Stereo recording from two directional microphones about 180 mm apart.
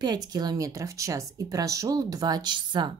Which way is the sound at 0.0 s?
20° right (ahead or behind).